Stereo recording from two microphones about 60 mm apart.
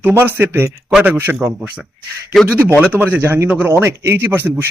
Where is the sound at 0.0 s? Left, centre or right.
Right.